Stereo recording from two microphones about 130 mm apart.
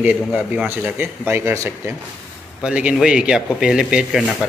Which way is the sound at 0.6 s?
15° right (ahead or behind).